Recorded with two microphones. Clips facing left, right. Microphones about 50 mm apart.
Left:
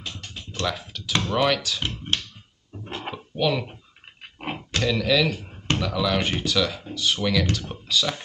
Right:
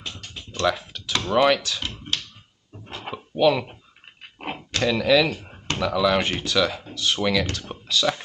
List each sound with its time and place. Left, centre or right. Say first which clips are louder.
0.6 s speech: right 5 dB; centre
2.8 s a sound: left 3 dB; left
3.3 s speech: right 5 dB; centre
4.4 s a sound: even; centre
4.8 s speech: right 3 dB; centre
7.2 s speech: right 2 dB; centre